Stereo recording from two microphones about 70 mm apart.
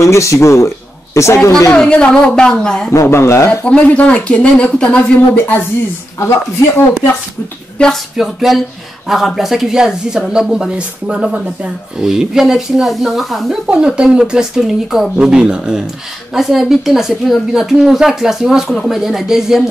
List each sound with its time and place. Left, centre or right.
0.0 s speech: left
1.8 s speech: centre
2.9 s speech: left
3.6 s speech: centre
7.8 s speech: centre
8.2 s speech: centre
13.7 s speech: centre